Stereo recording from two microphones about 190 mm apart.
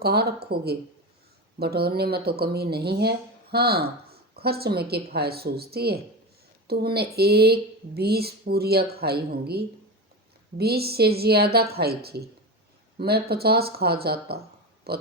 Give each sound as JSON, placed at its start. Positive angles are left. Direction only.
{"t": 0.0, "sound": "speech", "side_deg": -55}